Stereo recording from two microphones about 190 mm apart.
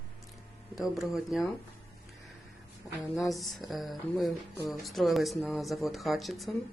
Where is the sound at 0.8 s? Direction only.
Centre (ahead or behind).